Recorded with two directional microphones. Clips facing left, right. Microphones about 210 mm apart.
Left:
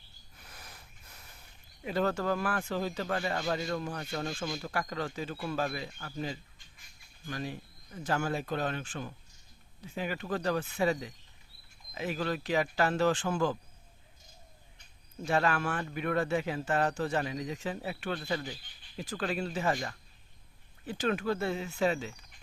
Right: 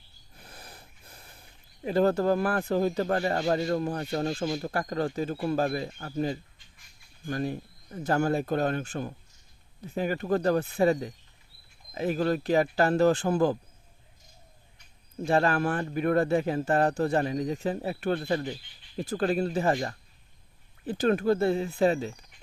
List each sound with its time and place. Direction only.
0.3 s snort: 30° right (ahead or behind)
1.8 s speech: 35° right (ahead or behind)
11.9 s speech: 40° right (ahead or behind)
15.2 s speech: 30° right (ahead or behind)